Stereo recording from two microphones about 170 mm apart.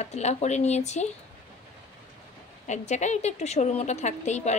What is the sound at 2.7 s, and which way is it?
A woman's voice, 45° left (ahead or behind).